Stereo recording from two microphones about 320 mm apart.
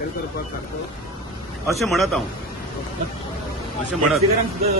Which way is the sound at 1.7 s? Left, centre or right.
Centre.